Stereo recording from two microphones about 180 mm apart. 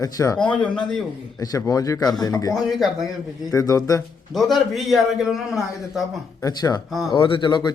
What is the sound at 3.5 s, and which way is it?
Speech, 20° left (ahead or behind).